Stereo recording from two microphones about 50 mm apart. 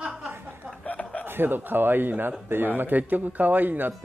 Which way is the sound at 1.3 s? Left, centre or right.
Right.